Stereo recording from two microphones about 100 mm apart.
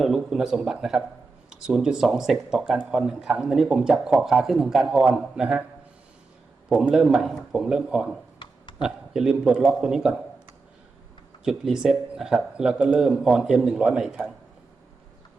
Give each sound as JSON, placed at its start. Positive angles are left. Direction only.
{"t": 0.0, "sound": "speech", "side_deg": -5}
{"t": 6.7, "sound": "speech", "side_deg": -5}
{"t": 8.4, "sound": "a sound", "side_deg": 55}
{"t": 8.8, "sound": "speech", "side_deg": -5}
{"t": 11.4, "sound": "speech", "side_deg": -5}